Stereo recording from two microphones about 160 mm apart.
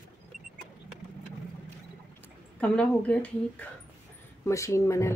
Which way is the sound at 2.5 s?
5° left (ahead or behind).